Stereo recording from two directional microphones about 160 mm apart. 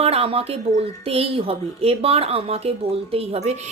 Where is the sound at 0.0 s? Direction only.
40° right (ahead or behind).